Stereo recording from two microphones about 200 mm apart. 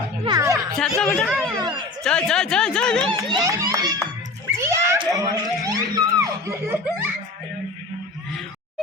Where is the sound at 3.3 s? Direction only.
20° right (ahead or behind).